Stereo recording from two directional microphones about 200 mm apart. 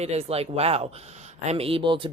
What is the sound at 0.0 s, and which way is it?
A man's voice, 30° right (ahead or behind).